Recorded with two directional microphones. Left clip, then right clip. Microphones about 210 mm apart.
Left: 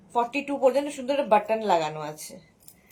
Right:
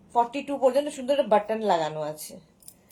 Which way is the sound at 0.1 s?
10° left (ahead or behind).